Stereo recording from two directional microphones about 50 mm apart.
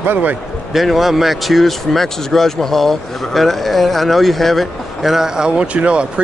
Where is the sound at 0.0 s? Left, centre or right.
Right.